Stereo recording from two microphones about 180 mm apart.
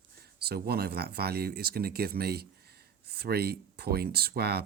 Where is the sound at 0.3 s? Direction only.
60° right (ahead or behind).